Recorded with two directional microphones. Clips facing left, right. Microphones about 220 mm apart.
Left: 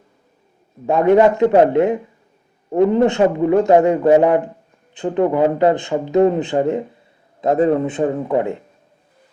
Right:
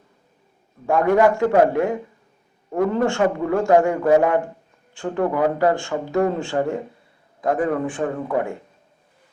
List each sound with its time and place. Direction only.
0.9 s speech: 20° left (ahead or behind)